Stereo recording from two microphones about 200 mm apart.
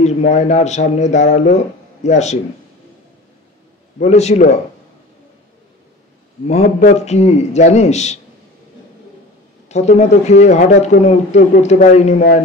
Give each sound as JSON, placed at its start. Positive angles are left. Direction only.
{"t": 0.0, "sound": "a man's voice", "side_deg": 35}
{"t": 4.0, "sound": "a man's voice", "side_deg": 35}
{"t": 6.4, "sound": "a man's voice", "side_deg": 35}
{"t": 9.7, "sound": "a man's voice", "side_deg": 35}